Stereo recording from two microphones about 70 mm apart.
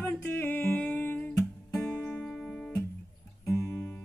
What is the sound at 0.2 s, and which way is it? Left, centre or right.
Music, left.